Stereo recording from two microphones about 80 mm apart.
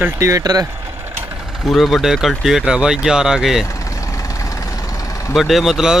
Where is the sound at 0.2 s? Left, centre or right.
Right.